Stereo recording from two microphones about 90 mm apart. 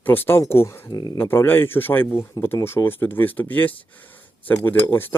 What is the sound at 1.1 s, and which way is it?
Speech, 25° left (ahead or behind).